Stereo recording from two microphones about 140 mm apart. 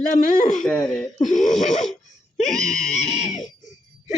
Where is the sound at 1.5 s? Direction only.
60° left (ahead or behind).